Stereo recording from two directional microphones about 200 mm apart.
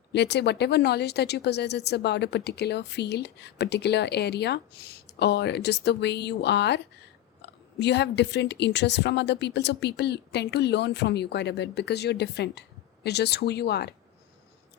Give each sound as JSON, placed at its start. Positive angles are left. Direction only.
{"t": 0.1, "sound": "speech", "side_deg": 60}